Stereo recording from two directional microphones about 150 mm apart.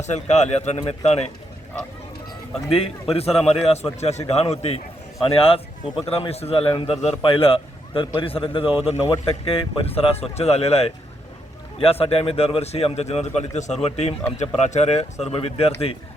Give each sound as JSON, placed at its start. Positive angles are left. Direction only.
{"t": 0.0, "sound": "a man's voice", "side_deg": 50}
{"t": 2.7, "sound": "a man's voice", "side_deg": 40}